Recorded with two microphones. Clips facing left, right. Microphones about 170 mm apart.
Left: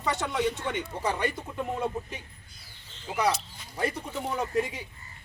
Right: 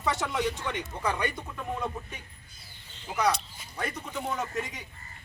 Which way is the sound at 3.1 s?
5° left (ahead or behind).